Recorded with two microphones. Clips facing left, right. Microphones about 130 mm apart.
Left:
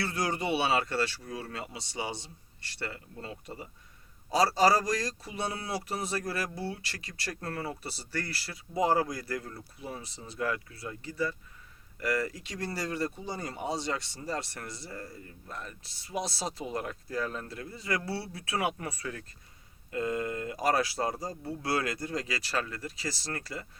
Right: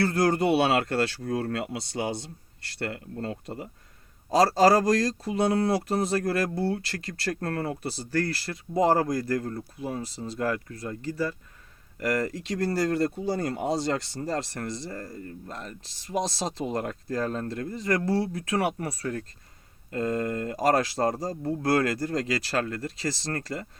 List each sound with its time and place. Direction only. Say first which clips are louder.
0.0 s speech: right 8 dB; 55° right (ahead or behind)
16.1 s speech: right 6 dB; 25° right (ahead or behind)
16.6 s speech: right 6 dB; 55° right (ahead or behind)